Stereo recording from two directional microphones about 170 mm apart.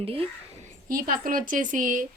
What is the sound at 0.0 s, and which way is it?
Speech, 35° right (ahead or behind).